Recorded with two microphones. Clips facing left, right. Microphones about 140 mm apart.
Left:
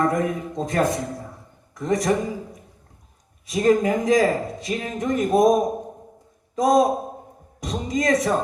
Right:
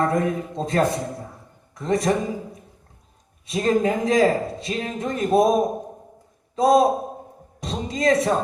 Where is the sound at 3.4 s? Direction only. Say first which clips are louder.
Left 2 dB; 30° right (ahead or behind).